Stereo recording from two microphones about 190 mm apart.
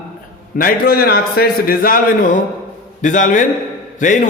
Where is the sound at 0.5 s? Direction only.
50° left (ahead or behind).